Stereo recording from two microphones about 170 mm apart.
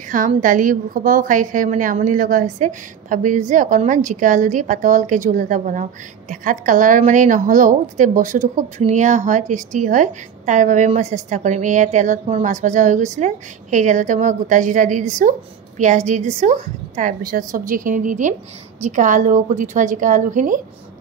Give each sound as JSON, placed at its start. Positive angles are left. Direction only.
{"t": 0.4, "sound": "a woman's voice", "side_deg": -50}
{"t": 17.2, "sound": "a woman's voice", "side_deg": -55}